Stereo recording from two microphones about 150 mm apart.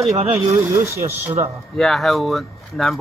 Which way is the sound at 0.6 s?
20° right (ahead or behind).